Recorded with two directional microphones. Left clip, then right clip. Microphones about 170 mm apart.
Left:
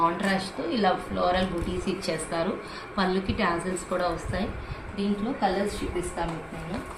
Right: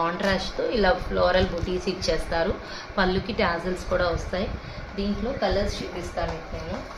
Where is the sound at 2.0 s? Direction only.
35° right (ahead or behind).